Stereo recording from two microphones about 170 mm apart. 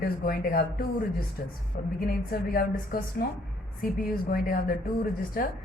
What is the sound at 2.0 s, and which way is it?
A woman's voice, 55° left (ahead or behind).